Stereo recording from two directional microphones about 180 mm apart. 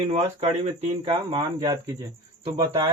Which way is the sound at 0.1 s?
35° right (ahead or behind).